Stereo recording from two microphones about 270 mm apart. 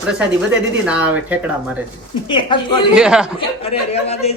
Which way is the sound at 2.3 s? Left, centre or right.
Centre.